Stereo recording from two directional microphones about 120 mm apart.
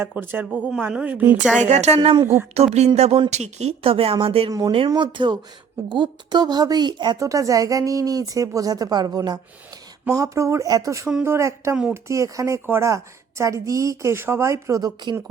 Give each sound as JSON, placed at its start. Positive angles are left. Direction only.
{"t": 0.0, "sound": "a woman's voice", "side_deg": -20}
{"t": 1.6, "sound": "a woman's voice", "side_deg": -70}
{"t": 2.2, "sound": "a woman's voice", "side_deg": -20}
{"t": 2.7, "sound": "speech", "side_deg": -65}
{"t": 7.2, "sound": "a woman's voice", "side_deg": -25}